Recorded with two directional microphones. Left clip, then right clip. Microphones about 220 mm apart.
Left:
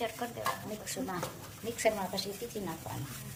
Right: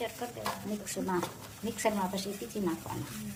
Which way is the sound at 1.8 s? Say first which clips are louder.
Left 1 dB; 35° right (ahead or behind).